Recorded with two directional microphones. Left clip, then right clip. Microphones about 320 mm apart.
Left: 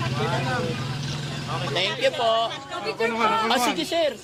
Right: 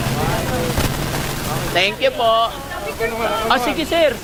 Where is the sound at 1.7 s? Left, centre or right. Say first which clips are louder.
Right 6 dB; centre.